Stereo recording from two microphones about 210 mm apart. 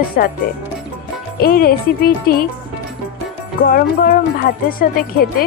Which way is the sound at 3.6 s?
45° left (ahead or behind).